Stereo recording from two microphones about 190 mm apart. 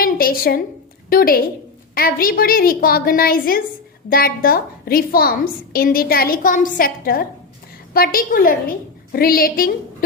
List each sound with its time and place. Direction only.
0.0 s a woman's voice: 50° left (ahead or behind)